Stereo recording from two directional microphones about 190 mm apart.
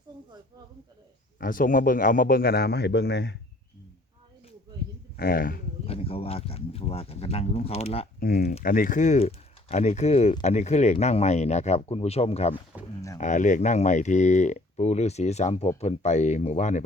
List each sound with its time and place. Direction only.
1.4 s speech: 45° left (ahead or behind); by 3.3 s 65° left (ahead or behind)
5.1 s speech: 55° left (ahead or behind)
5.8 s speech: 30° left (ahead or behind)
8.2 s speech: 55° left (ahead or behind); by 12.5 s 35° left (ahead or behind)
12.7 s speech: 10° right (ahead or behind)
13.1 s speech: 40° left (ahead or behind)